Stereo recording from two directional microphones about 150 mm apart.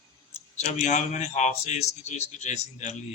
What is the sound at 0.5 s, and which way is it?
A man's voice, 50° left (ahead or behind).